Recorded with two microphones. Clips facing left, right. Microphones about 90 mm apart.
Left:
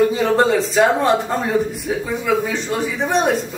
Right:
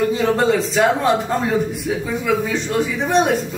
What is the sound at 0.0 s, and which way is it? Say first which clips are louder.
A man's voice: left 2 dB; centre (ahead or behind).